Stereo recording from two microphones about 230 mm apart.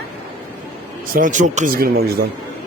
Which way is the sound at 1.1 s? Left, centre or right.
Right.